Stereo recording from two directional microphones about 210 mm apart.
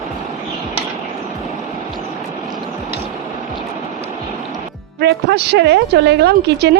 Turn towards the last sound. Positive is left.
turn(degrees=-50)  # may be behind; listen again after turning